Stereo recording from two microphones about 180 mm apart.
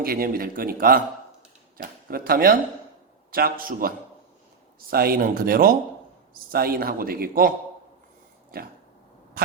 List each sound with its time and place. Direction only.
0.0 s a man's voice: 55° right (ahead or behind)
8.5 s a man's voice: 55° right (ahead or behind)